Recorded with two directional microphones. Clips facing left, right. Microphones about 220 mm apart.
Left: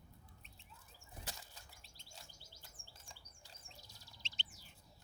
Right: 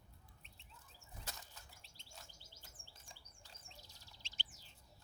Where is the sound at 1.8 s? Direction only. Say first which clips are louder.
Left 1 dB; 40° left (ahead or behind).